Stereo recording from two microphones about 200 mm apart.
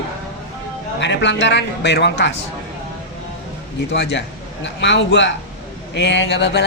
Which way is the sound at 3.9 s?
60° left (ahead or behind).